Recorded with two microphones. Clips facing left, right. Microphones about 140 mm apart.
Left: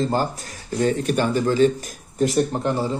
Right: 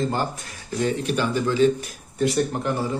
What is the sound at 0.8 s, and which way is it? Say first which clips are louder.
Speech: left 3 dB; 45° left (ahead or behind).